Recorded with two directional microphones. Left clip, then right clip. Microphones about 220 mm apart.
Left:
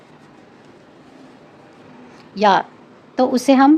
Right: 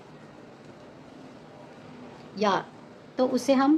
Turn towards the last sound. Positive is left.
turn(degrees=40)  # may be behind; listen again after turning